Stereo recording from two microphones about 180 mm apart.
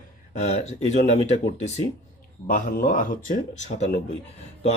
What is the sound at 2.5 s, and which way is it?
Speech, 50° left (ahead or behind).